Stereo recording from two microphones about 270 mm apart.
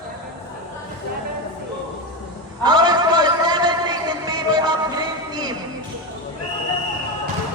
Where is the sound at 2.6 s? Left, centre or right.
Centre.